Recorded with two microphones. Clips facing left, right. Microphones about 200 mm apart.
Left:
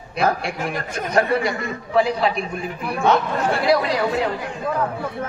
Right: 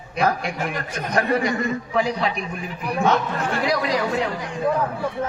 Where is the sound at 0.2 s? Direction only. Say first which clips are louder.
Left 1 dB; 35° left (ahead or behind).